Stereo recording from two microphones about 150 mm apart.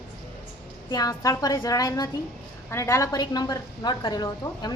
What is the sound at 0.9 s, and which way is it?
A woman's voice, 25° left (ahead or behind).